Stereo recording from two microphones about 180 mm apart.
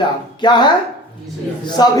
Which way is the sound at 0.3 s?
25° left (ahead or behind).